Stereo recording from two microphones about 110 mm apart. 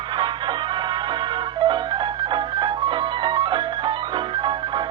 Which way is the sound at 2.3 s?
45° right (ahead or behind).